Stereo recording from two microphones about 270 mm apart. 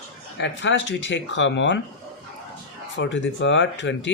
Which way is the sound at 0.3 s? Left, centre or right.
Left.